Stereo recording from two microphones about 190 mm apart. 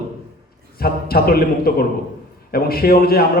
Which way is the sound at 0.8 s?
55° left (ahead or behind).